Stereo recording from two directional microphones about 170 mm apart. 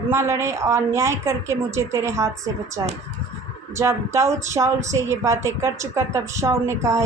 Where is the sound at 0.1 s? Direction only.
15° right (ahead or behind).